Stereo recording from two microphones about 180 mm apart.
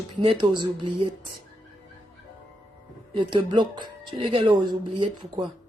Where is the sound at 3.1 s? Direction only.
25° right (ahead or behind).